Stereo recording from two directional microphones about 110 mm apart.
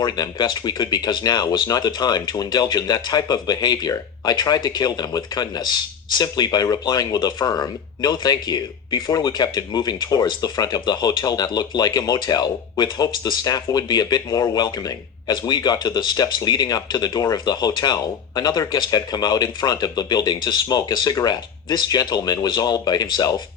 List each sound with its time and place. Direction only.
0.0 s speech: 40° left (ahead or behind)